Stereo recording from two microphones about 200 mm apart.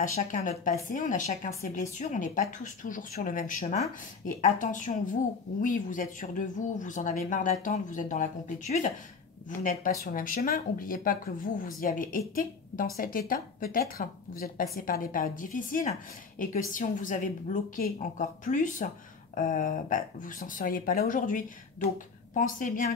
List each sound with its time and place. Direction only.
0.0 s a woman's voice: 40° left (ahead or behind)